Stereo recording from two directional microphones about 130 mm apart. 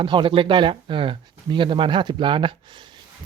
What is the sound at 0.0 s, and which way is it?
Speech, 40° right (ahead or behind).